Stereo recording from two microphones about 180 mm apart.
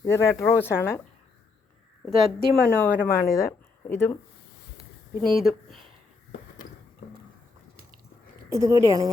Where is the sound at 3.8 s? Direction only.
15° left (ahead or behind).